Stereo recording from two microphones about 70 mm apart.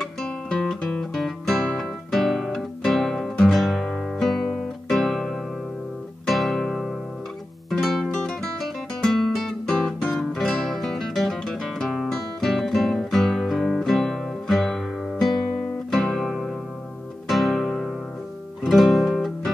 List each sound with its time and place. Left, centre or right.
0.0 s guitar: centre
6.2 s music: centre
8.2 s guitar: centre
15.9 s music: centre